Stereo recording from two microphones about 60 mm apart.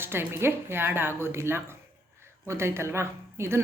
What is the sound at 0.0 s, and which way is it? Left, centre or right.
A woman's voice, right.